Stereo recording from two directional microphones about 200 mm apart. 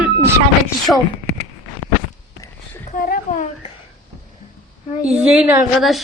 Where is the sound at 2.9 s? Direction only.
45° left (ahead or behind).